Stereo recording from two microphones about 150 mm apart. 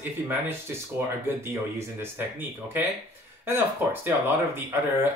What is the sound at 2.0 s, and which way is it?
Speech, 15° right (ahead or behind).